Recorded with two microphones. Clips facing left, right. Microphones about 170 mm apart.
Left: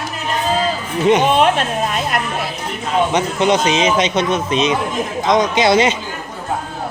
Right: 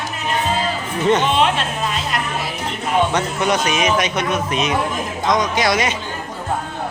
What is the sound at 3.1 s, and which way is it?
Speech, 25° left (ahead or behind).